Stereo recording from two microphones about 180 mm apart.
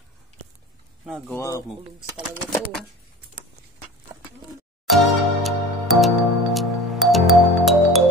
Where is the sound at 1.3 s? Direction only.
15° left (ahead or behind).